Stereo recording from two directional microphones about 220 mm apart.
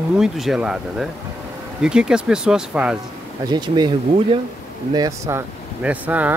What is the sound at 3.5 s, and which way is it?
Speech, 20° right (ahead or behind).